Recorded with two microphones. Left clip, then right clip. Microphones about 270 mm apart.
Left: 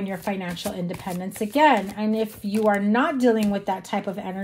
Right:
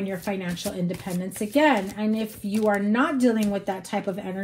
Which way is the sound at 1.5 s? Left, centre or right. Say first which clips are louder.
Left 3 dB; left.